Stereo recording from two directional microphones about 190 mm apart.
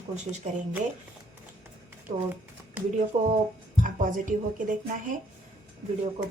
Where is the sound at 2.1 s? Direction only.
45° right (ahead or behind).